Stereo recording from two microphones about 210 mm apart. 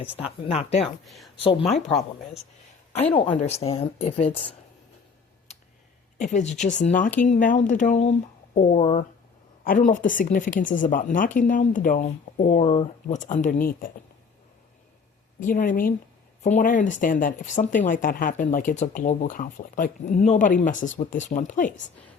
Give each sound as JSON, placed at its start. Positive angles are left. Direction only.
{"t": 0.4, "sound": "a woman's voice", "side_deg": 30}
{"t": 1.0, "sound": "speech", "side_deg": 0}
{"t": 1.4, "sound": "a woman's voice", "side_deg": 25}
{"t": 2.9, "sound": "a woman's voice", "side_deg": 30}
{"t": 6.1, "sound": "speech", "side_deg": 35}
{"t": 8.8, "sound": "a woman's voice", "side_deg": 25}
{"t": 9.6, "sound": "speech", "side_deg": 40}
{"t": 15.4, "sound": "speech", "side_deg": 40}